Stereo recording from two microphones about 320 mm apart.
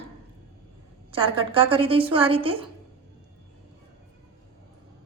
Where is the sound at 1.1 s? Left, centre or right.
Centre.